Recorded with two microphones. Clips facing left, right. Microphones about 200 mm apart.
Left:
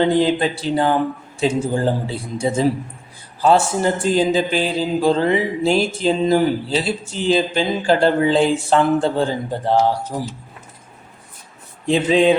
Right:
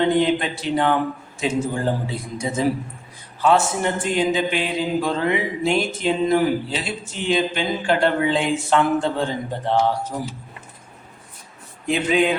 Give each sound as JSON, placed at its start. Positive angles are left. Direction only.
{"t": 0.0, "sound": "a man's voice", "side_deg": 30}
{"t": 11.9, "sound": "speech", "side_deg": 30}